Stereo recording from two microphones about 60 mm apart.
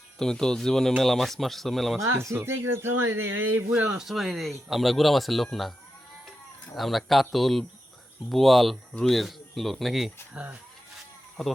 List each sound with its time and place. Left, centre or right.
0.2 s speech: centre
2.0 s speech: right
3.8 s speech: centre
6.7 s speech: centre
10.3 s speech: right
11.4 s speech: centre